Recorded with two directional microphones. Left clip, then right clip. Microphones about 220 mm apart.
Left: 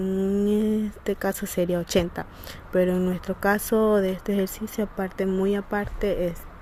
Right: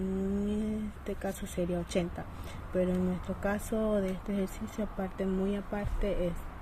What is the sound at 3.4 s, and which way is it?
Speech, 45° left (ahead or behind).